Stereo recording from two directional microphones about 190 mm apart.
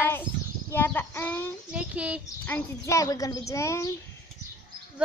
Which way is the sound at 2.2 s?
15° left (ahead or behind).